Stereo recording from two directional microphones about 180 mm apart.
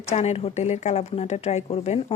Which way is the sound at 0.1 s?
35° left (ahead or behind).